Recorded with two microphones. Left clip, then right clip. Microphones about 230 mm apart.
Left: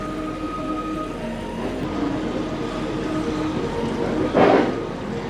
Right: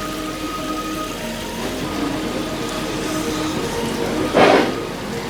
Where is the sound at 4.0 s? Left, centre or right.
Centre.